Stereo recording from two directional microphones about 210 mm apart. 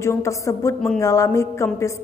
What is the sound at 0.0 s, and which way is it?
A woman's voice, 15° left (ahead or behind).